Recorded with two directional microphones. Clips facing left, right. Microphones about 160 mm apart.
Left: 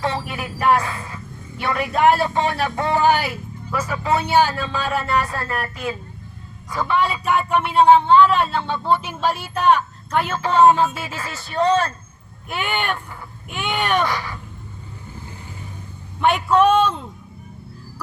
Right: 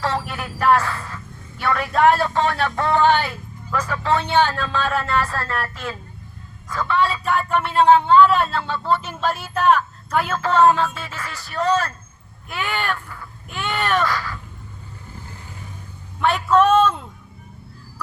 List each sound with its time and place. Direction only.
0.1 s speech: 5° left (ahead or behind)
0.8 s a woman's voice: 15° left (ahead or behind); by 8.5 s centre (ahead or behind)
8.6 s speech: 25° left (ahead or behind)
8.9 s speech: 10° left (ahead or behind)
11.0 s speech: 25° left (ahead or behind)
16.2 s speech: 15° left (ahead or behind)
16.6 s speech: centre (ahead or behind)